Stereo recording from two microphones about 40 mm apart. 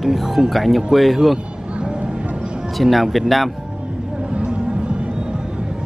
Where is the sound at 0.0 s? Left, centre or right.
Centre.